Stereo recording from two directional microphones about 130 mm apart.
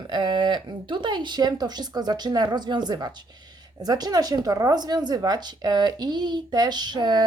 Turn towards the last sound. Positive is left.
turn(degrees=-35)  # may be behind; listen again after turning